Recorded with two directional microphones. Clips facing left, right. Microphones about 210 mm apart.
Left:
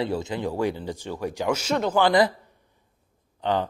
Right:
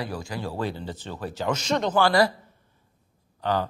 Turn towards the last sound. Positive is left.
turn(degrees=20)  # may be behind; listen again after turning